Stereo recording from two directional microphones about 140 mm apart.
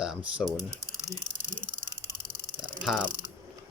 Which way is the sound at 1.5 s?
75° right (ahead or behind).